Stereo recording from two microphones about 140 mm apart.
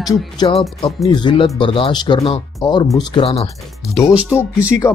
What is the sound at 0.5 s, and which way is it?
Speech, 45° left (ahead or behind).